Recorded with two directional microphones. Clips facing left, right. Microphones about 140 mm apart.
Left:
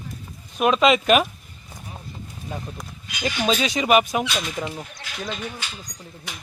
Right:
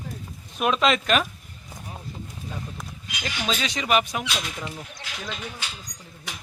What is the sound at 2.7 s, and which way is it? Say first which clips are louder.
Speech: left 2 dB; 15° left (ahead or behind).